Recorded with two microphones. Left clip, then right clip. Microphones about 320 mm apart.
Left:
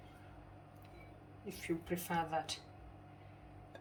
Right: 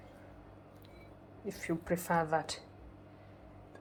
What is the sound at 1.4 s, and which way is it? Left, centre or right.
Speech, centre.